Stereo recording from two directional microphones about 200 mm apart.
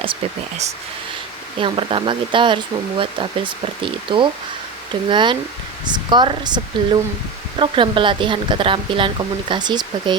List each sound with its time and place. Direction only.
1.5 s a woman's voice: 25° right (ahead or behind)